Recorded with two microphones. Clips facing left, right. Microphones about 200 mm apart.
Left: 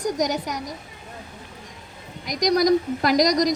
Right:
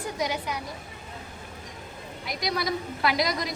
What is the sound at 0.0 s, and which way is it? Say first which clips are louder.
Speech: left 6 dB; 40° left (ahead or behind).